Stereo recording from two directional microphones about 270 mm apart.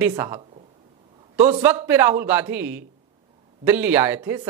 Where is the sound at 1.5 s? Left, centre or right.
Centre.